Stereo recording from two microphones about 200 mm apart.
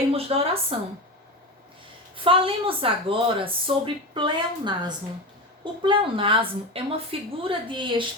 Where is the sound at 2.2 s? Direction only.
25° right (ahead or behind).